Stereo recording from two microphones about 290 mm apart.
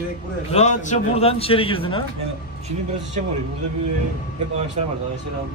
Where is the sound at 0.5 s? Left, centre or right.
Left.